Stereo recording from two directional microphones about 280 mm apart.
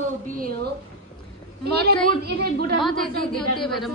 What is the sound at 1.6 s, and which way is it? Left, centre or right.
Speech, right.